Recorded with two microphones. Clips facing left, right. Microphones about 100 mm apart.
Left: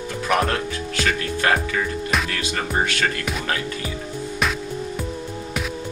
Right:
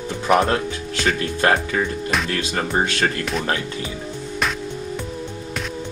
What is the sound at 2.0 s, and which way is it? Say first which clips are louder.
Speech: right 1 dB; centre (ahead or behind).